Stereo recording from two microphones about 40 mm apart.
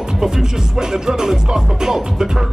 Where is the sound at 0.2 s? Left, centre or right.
Centre.